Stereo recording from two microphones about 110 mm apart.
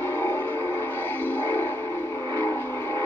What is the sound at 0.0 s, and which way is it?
Music, 20° left (ahead or behind).